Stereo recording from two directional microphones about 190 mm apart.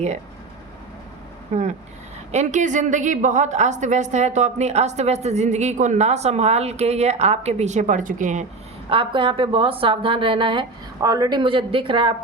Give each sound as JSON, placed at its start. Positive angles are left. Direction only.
{"t": 1.5, "sound": "a woman's voice", "side_deg": -40}
{"t": 8.9, "sound": "a woman's voice", "side_deg": -25}